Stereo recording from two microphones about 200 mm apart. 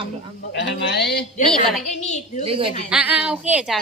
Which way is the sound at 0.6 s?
60° left (ahead or behind).